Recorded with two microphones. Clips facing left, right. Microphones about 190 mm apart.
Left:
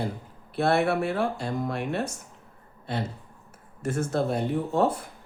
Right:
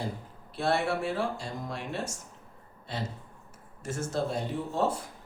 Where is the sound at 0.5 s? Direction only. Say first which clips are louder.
Left 5 dB; 60° left (ahead or behind).